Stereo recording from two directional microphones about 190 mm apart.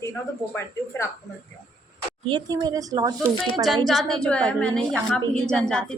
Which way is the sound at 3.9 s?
Centre (ahead or behind).